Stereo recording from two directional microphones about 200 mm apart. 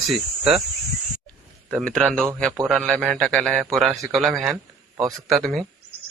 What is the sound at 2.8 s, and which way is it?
Speech, 10° right (ahead or behind).